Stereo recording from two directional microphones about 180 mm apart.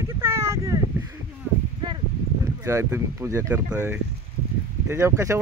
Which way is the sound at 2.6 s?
15° right (ahead or behind).